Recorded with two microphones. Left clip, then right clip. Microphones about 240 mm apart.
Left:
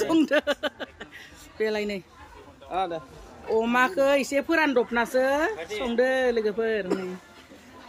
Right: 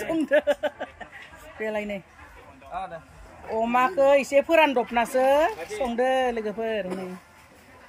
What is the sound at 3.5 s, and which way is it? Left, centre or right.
Speech, centre.